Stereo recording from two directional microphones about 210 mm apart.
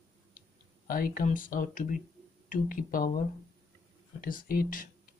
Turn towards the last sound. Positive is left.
turn(degrees=40)  # may be behind; listen again after turning